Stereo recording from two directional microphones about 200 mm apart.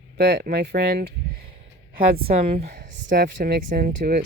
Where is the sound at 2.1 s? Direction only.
50° right (ahead or behind).